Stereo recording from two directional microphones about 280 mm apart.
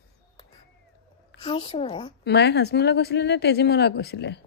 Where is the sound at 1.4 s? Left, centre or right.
Centre.